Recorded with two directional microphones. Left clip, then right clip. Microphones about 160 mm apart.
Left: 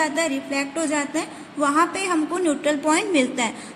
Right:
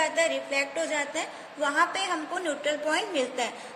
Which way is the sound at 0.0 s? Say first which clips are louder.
Left 3 dB; 50° left (ahead or behind).